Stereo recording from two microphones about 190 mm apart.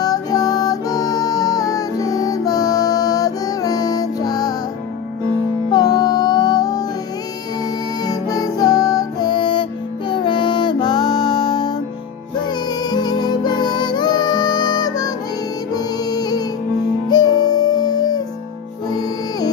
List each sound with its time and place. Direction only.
0.0 s music: 20° left (ahead or behind)
5.7 s music: 20° left (ahead or behind)
8.0 s music: 20° left (ahead or behind)
12.9 s music: 20° left (ahead or behind)